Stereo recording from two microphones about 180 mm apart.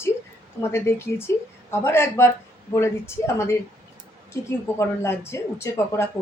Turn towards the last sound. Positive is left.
turn(degrees=15)  # may be behind; listen again after turning